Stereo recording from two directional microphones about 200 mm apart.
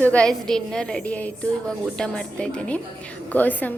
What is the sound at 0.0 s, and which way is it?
A woman's voice, 5° left (ahead or behind).